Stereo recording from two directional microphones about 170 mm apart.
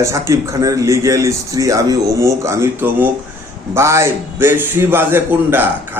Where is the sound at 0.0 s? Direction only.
15° right (ahead or behind).